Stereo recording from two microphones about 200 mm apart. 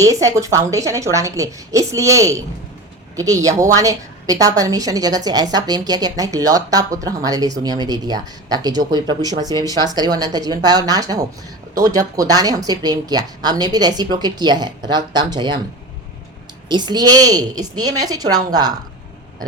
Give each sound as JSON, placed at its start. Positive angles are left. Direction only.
{"t": 0.0, "sound": "a woman's voice", "side_deg": -15}
{"t": 16.6, "sound": "speech", "side_deg": -20}